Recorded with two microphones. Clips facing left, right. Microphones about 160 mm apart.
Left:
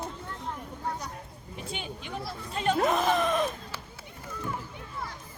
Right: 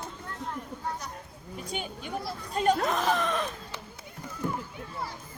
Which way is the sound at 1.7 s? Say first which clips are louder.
Right 2 dB; 45° right (ahead or behind).